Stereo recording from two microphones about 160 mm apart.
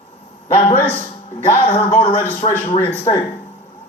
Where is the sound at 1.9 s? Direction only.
45° left (ahead or behind).